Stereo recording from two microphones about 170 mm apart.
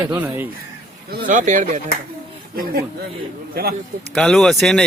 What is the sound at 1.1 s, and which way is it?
Speech, 50° right (ahead or behind).